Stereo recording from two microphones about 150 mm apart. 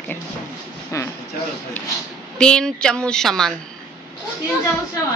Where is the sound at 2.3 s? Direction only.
5° left (ahead or behind).